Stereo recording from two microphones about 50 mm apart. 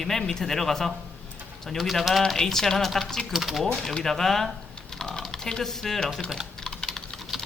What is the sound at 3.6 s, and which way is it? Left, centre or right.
Speech, centre.